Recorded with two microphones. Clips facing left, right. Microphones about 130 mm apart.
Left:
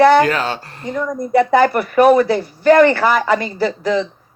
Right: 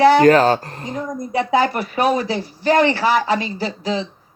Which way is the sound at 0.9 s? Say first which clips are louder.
Left 7 dB; 60° left (ahead or behind).